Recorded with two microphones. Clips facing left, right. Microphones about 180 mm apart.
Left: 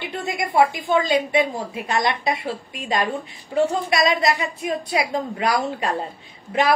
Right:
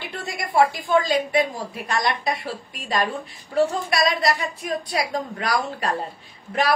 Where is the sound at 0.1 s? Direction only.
20° left (ahead or behind).